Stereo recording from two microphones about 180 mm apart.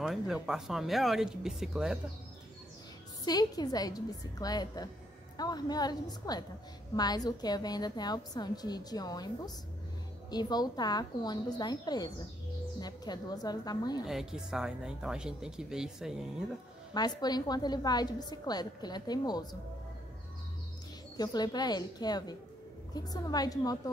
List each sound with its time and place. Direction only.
0.0 s speech: 5° right (ahead or behind)
3.3 s a woman's voice: 20° left (ahead or behind)
10.3 s a woman's voice: 25° left (ahead or behind)
14.0 s speech: 5° right (ahead or behind)
16.9 s a woman's voice: 20° left (ahead or behind)
21.2 s a woman's voice: 20° left (ahead or behind)